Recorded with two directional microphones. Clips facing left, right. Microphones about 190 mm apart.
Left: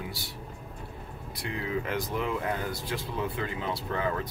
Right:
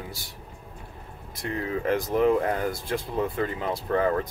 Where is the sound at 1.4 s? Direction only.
45° right (ahead or behind).